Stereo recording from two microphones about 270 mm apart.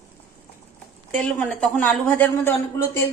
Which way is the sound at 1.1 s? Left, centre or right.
Centre.